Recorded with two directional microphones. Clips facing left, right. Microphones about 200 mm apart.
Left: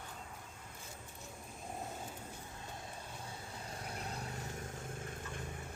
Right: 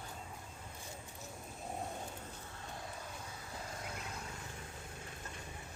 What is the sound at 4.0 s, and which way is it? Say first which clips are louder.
Vehicle: left 3 dB; 35° left (ahead or behind).